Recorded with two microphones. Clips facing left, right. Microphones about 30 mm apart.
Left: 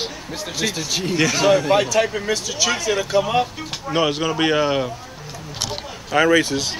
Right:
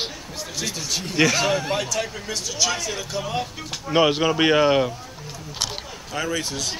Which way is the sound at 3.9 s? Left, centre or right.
Centre.